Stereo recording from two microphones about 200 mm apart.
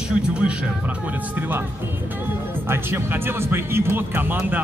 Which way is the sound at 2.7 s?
10° right (ahead or behind).